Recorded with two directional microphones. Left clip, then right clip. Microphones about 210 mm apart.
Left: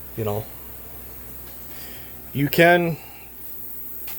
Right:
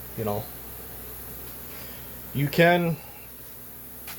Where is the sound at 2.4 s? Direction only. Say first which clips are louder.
Left 4 dB; 35° left (ahead or behind).